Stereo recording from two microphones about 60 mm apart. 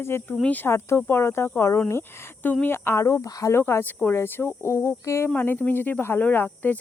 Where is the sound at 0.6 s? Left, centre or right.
Left.